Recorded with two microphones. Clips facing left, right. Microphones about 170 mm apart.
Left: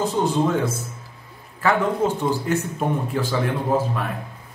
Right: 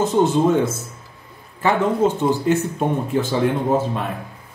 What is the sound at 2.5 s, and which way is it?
A man's voice, 20° right (ahead or behind).